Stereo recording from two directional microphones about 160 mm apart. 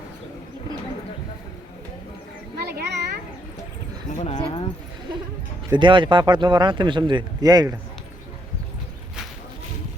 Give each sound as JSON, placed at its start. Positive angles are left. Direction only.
{"t": 2.7, "sound": "a sound", "side_deg": -90}
{"t": 4.2, "sound": "speech", "side_deg": 35}
{"t": 5.7, "sound": "speech", "side_deg": -30}